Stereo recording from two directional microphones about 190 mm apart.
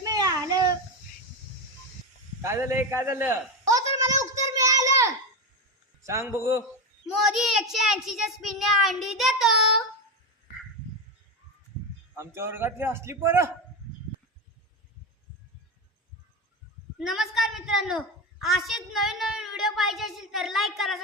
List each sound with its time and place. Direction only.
0.0 s a sound: 20° right (ahead or behind)
2.4 s a man's voice: 15° right (ahead or behind)
4.5 s child singing: 15° right (ahead or behind)
6.0 s a man's voice: 15° right (ahead or behind)
7.3 s a woman's voice: centre (ahead or behind)
12.1 s a man's voice: 15° right (ahead or behind)
17.0 s a woman's voice: centre (ahead or behind)